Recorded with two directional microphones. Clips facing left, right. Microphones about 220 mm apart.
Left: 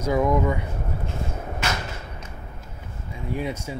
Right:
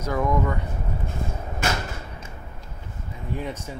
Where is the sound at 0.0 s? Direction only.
10° left (ahead or behind).